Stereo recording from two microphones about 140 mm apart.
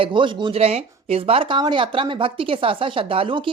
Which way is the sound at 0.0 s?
35° right (ahead or behind).